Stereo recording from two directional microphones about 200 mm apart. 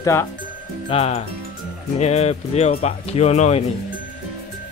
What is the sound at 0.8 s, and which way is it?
Speech, 30° left (ahead or behind).